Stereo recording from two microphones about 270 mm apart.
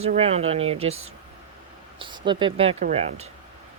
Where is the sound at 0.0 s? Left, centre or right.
Right.